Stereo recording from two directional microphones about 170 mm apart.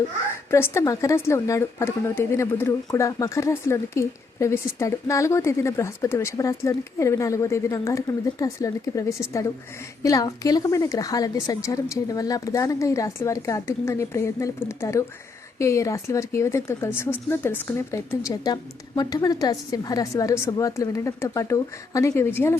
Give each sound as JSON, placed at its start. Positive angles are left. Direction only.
{"t": 0.5, "sound": "a woman's voice", "side_deg": 15}